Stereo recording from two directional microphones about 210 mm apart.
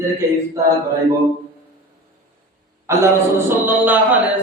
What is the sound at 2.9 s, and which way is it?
A man's voice, 15° right (ahead or behind).